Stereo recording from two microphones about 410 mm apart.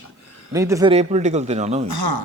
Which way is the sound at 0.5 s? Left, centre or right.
Centre.